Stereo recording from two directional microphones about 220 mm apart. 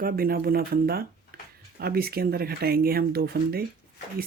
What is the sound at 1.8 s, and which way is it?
Speech, 45° right (ahead or behind).